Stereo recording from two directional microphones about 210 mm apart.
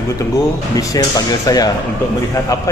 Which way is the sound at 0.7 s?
15° left (ahead or behind).